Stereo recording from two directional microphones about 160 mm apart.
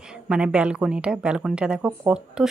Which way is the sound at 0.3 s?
5° right (ahead or behind).